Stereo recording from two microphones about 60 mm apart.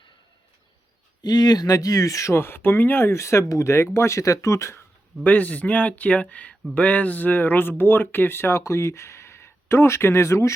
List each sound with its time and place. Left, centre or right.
1.5 s speech: left
2.3 s speech: left
5.2 s speech: left